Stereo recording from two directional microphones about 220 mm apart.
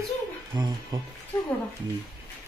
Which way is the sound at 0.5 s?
20° right (ahead or behind).